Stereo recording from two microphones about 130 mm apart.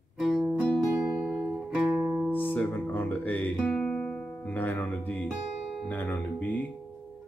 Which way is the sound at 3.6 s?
5° left (ahead or behind).